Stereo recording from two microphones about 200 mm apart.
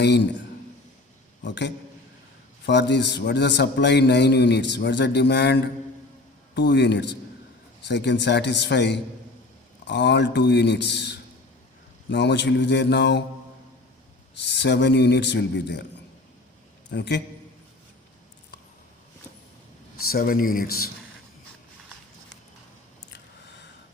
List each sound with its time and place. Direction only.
1.4 s a man's voice: 60° left (ahead or behind)
14.4 s a man's voice: 60° left (ahead or behind)
16.9 s a man's voice: 60° left (ahead or behind)
20.1 s speech: 50° left (ahead or behind)